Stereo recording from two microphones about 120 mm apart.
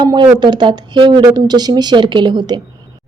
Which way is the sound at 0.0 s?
35° right (ahead or behind).